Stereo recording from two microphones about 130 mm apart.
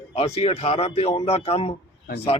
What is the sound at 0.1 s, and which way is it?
Speech, 50° left (ahead or behind).